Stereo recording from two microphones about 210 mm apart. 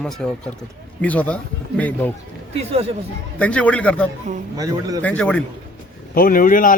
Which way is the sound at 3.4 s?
5° left (ahead or behind).